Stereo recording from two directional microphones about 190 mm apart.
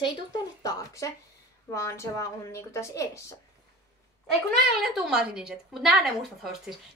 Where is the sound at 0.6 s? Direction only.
20° left (ahead or behind).